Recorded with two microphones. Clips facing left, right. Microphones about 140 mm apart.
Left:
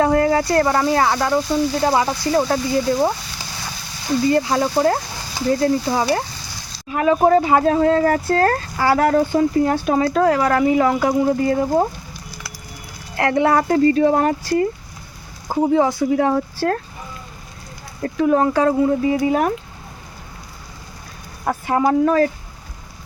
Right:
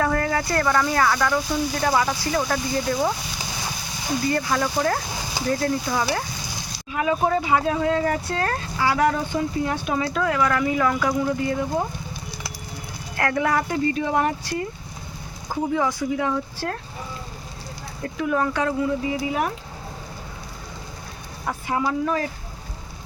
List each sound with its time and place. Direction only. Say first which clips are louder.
0.0 s speech: left 7 dB; 25° left (ahead or behind)
4.3 s speech: left 5 dB; 20° left (ahead or behind)
6.9 s speech: left 7 dB; 45° left (ahead or behind)
11.4 s speech: left 7 dB; 40° left (ahead or behind)
13.1 s speech: left 6 dB; 25° left (ahead or behind)
13.6 s speech: left 9 dB; 50° left (ahead or behind)
15.4 s speech: left 7 dB; 30° left (ahead or behind)
16.1 s speech: left 7 dB; 50° left (ahead or behind)
18.0 s speech: left 7 dB; 35° left (ahead or behind)
18.9 s speech: left 7 dB; 45° left (ahead or behind)
21.4 s speech: left 7 dB; 50° left (ahead or behind)